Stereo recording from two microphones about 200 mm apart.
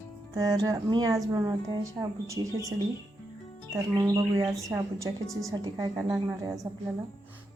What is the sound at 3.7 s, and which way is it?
Speech, 15° right (ahead or behind).